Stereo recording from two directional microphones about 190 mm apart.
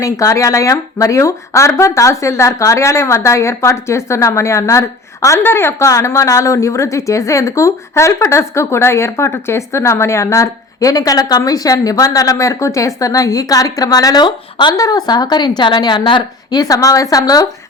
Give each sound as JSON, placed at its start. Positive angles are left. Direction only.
{"t": 0.0, "sound": "speech", "side_deg": 15}